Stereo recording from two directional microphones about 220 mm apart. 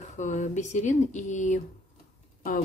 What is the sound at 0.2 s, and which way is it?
Speech, 35° left (ahead or behind).